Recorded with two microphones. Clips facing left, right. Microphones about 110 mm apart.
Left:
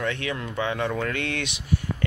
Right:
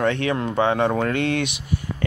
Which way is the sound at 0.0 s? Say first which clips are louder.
Right 7 dB; 35° right (ahead or behind).